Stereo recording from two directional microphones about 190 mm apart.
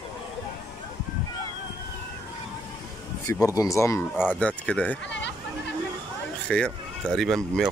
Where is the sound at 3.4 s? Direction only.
15° left (ahead or behind).